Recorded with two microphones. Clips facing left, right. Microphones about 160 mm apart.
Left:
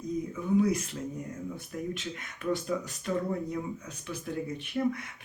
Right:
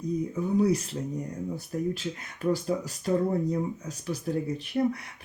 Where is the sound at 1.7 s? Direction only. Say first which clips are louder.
Right 6 dB; 35° right (ahead or behind).